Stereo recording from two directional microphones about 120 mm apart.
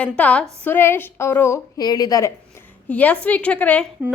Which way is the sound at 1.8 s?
35° left (ahead or behind).